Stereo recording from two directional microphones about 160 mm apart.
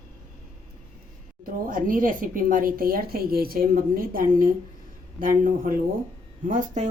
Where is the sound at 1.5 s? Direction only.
60° right (ahead or behind).